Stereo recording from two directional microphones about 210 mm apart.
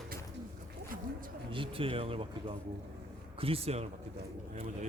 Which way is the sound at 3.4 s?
30° right (ahead or behind).